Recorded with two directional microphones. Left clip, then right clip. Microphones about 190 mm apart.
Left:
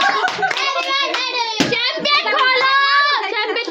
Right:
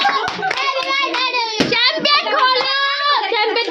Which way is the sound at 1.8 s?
60° right (ahead or behind).